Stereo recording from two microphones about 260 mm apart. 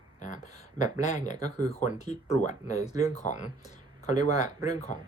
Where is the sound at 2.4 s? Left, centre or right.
Left.